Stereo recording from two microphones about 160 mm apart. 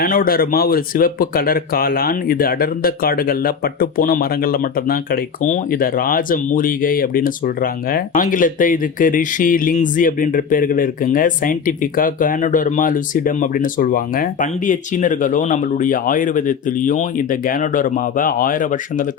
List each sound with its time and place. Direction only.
0.0 s speech: 60° left (ahead or behind)